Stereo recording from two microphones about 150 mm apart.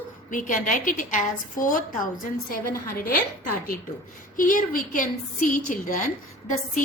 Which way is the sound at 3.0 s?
75° left (ahead or behind).